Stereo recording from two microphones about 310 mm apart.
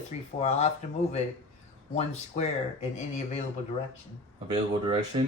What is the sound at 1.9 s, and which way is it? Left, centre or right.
Speech, left.